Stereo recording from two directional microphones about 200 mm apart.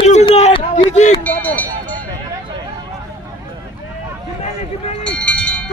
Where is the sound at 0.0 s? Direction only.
30° left (ahead or behind).